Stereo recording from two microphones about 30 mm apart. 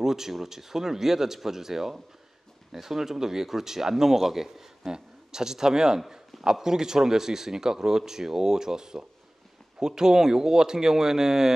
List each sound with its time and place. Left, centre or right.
0.0 s speech: centre
4.8 s speech: right